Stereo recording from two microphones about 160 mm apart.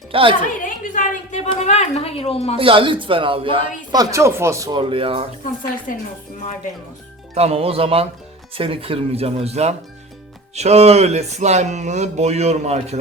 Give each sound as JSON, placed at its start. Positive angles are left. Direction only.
{"t": 0.1, "sound": "speech", "side_deg": -35}
{"t": 0.6, "sound": "a woman's voice", "side_deg": 50}
{"t": 2.6, "sound": "speech", "side_deg": -35}
{"t": 3.9, "sound": "speech", "side_deg": -20}
{"t": 4.8, "sound": "speech", "side_deg": -35}
{"t": 7.3, "sound": "speech", "side_deg": -40}